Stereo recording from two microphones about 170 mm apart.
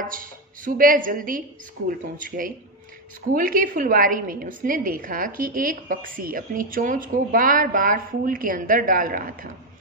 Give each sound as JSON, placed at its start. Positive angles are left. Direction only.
{"t": 0.0, "sound": "a woman's voice", "side_deg": -55}